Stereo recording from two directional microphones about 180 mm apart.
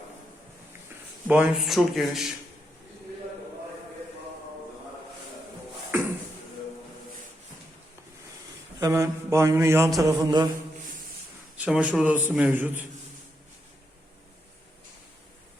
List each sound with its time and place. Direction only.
1.3 s speech: 5° right (ahead or behind)
8.8 s a man's voice: 15° right (ahead or behind)
10.0 s mantra: 20° right (ahead or behind)
11.5 s a man's voice: 5° right (ahead or behind)